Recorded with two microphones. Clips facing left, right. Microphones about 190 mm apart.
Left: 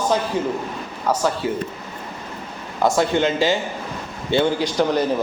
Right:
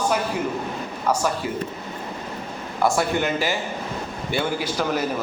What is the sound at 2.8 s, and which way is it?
A man's voice, 20° left (ahead or behind).